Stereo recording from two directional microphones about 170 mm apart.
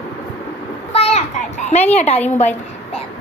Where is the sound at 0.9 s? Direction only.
35° left (ahead or behind).